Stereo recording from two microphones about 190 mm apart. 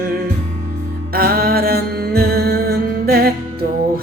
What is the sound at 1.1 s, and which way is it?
Music, 50° right (ahead or behind).